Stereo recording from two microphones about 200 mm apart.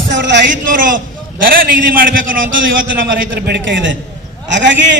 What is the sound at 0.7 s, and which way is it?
A man's voice, 45° right (ahead or behind).